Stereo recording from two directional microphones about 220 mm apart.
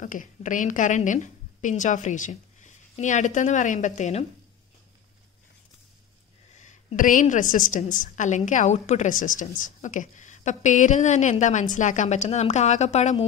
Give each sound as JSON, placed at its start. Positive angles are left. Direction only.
{"t": 0.0, "sound": "a woman's voice", "side_deg": 35}
{"t": 6.5, "sound": "a woman's voice", "side_deg": 30}